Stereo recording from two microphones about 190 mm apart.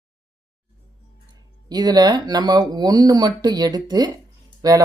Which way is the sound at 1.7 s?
20° right (ahead or behind).